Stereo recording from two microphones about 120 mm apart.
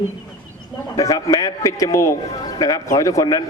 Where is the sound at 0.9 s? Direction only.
30° left (ahead or behind).